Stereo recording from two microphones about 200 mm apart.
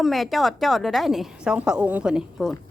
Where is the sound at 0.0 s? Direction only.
Centre (ahead or behind).